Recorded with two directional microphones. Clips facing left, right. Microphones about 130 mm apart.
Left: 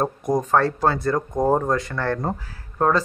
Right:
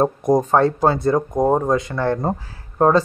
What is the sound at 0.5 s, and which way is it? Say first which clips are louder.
A man's voice: right 3 dB; 20° right (ahead or behind).